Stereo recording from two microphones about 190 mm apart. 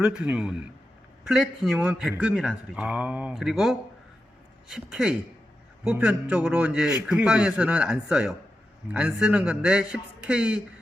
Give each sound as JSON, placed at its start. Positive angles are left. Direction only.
{"t": 0.0, "sound": "a man's voice", "side_deg": -5}